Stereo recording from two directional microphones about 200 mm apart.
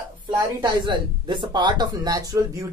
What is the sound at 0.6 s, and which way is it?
Speech, 25° right (ahead or behind).